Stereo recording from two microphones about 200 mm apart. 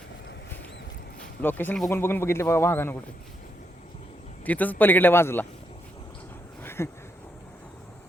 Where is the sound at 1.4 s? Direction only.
10° left (ahead or behind).